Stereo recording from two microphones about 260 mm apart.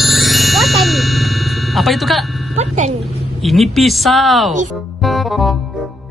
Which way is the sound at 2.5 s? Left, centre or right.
Right.